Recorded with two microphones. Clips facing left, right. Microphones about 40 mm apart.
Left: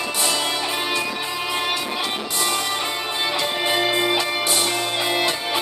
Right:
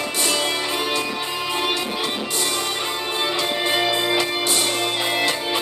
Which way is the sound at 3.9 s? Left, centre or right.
Left.